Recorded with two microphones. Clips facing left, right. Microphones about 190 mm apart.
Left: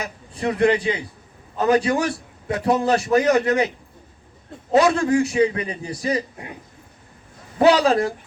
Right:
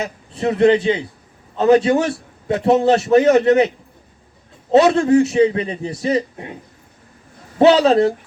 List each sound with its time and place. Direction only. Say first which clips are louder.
0.0 s a man's voice: right 4 dB; 25° right (ahead or behind)
4.7 s a man's voice: right 5 dB; 25° right (ahead or behind)
7.6 s a man's voice: right 4 dB; 25° right (ahead or behind)